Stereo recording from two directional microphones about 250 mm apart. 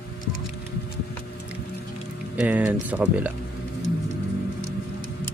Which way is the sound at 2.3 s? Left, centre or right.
Centre.